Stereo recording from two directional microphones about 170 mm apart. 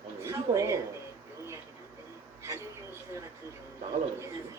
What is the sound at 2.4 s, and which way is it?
Speech, 15° right (ahead or behind).